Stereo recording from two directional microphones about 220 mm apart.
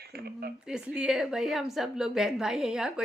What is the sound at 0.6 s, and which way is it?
A woman's voice, 5° right (ahead or behind).